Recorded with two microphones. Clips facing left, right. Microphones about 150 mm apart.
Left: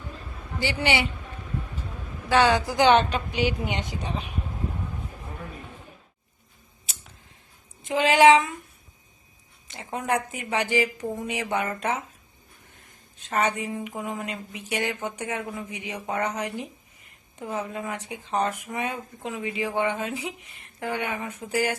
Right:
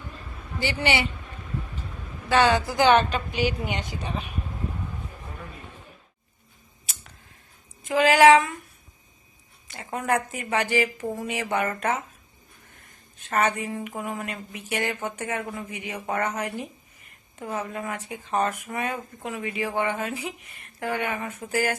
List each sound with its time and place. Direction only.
0.6 s speech: 15° left (ahead or behind)
2.3 s speech: 15° left (ahead or behind)
7.9 s speech: 25° left (ahead or behind)
9.6 s a woman's voice: 20° left (ahead or behind)
11.0 s speech: 5° right (ahead or behind)
11.3 s speech: 15° left (ahead or behind)
13.1 s speech: 15° left (ahead or behind)